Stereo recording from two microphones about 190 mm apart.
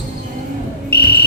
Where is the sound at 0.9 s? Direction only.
55° left (ahead or behind).